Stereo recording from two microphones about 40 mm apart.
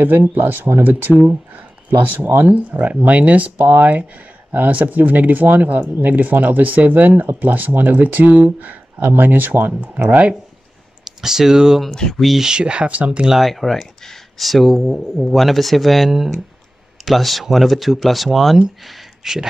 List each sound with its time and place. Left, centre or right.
0.0 s speech: right
1.9 s speech: right
2.4 s speech: right
11.1 s speech: centre
12.4 s speech: centre
13.3 s speech: centre
18.9 s a sound: centre